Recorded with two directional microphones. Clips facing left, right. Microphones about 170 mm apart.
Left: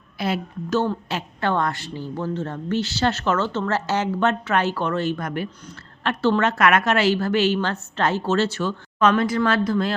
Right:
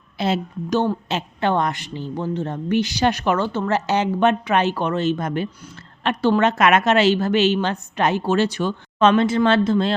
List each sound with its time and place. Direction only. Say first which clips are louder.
0.2 s a woman's voice: right 3 dB; 20° right (ahead or behind)